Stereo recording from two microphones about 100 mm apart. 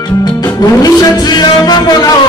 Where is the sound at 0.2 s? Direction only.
40° left (ahead or behind).